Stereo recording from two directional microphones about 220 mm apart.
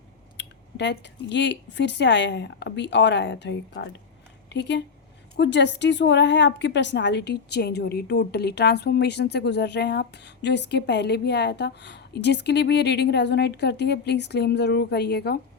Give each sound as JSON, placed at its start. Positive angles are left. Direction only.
{"t": 0.3, "sound": "a woman's voice", "side_deg": 50}
{"t": 5.4, "sound": "a woman's voice", "side_deg": 55}